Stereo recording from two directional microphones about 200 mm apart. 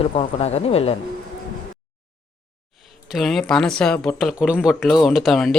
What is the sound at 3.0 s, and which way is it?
Speech, centre (ahead or behind).